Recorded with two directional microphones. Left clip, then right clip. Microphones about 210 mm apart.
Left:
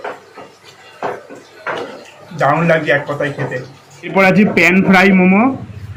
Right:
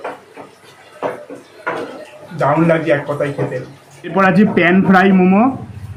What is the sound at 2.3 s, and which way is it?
A man's voice, 10° right (ahead or behind).